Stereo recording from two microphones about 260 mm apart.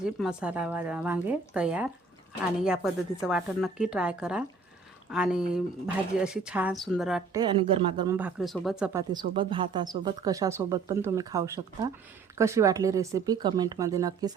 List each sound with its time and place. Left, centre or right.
0.0 s speech: centre
7.3 s speech: centre
8.1 s speech: centre